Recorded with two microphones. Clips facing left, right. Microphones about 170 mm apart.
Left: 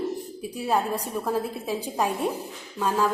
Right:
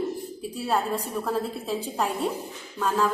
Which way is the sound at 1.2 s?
15° left (ahead or behind).